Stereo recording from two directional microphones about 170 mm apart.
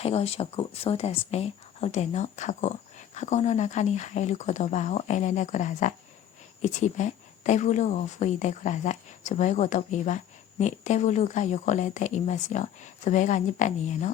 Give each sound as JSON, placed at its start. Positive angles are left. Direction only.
{"t": 0.0, "sound": "a woman's voice", "side_deg": 35}